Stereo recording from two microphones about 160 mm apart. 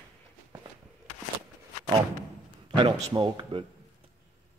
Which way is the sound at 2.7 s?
25° right (ahead or behind).